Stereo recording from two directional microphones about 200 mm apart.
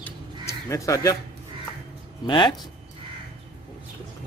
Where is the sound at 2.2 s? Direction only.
20° left (ahead or behind).